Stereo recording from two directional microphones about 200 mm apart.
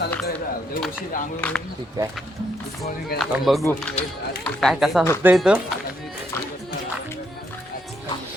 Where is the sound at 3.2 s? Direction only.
Centre (ahead or behind).